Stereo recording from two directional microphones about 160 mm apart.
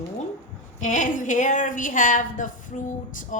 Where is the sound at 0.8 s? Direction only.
50° left (ahead or behind).